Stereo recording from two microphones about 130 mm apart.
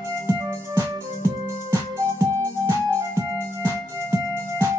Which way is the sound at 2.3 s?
25° right (ahead or behind).